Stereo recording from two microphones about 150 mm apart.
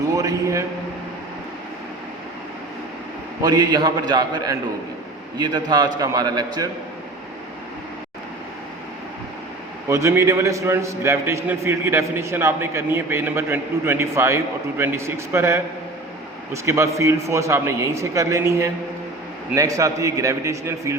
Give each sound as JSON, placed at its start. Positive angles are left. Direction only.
{"t": 0.2, "sound": "a man's voice", "side_deg": -20}
{"t": 3.4, "sound": "a man's voice", "side_deg": -30}
{"t": 9.9, "sound": "a man's voice", "side_deg": -20}